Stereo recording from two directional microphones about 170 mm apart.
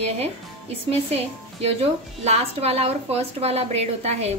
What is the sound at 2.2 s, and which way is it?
A woman's voice, 40° right (ahead or behind).